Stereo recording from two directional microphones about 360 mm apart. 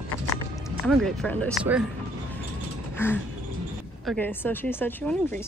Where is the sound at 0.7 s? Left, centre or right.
Centre.